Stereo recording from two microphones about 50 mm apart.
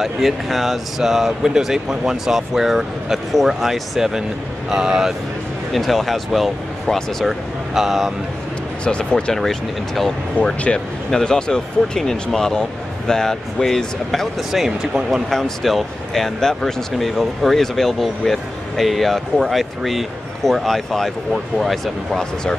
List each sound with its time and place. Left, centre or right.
0.0 s speech: centre
5.7 s speech: centre
8.8 s speech: centre
9.3 s speech: centre
10.4 s speech: left; by 14.3 s centre
14.5 s speech: centre
15.2 s speech: centre